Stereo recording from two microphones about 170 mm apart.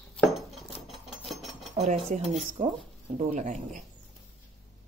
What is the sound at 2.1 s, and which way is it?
A woman's voice, 45° right (ahead or behind).